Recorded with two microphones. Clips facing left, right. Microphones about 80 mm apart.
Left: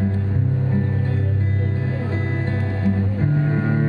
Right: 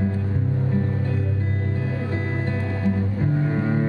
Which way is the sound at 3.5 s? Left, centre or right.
Left.